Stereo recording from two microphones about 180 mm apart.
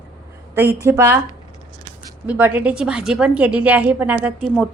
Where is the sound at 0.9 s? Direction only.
15° right (ahead or behind).